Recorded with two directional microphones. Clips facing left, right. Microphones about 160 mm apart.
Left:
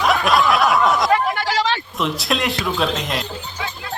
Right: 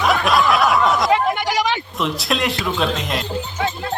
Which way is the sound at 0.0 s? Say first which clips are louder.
Even; centre (ahead or behind).